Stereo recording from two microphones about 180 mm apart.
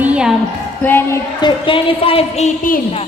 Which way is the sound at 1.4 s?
25° left (ahead or behind).